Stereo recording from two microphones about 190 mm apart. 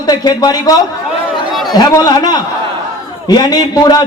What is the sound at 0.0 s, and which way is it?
A man's voice, 20° left (ahead or behind).